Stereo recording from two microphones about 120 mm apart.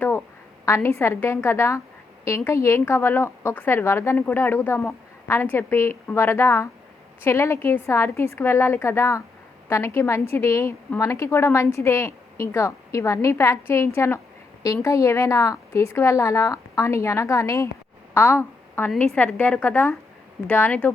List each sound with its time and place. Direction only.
0.6 s a woman's voice: 20° left (ahead or behind)
18.1 s a sound: 20° left (ahead or behind)
19.1 s a woman's voice: 15° left (ahead or behind)